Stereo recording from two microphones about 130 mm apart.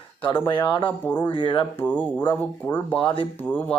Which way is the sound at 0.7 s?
40° left (ahead or behind).